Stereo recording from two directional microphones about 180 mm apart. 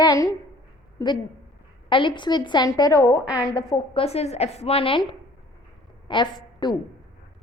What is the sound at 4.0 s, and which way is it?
A woman's voice, 35° left (ahead or behind).